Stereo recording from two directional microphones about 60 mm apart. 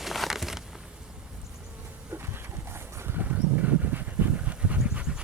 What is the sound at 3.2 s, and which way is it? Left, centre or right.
Dog, right.